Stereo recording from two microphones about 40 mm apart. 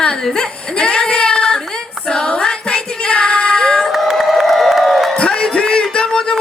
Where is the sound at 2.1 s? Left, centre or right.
Left.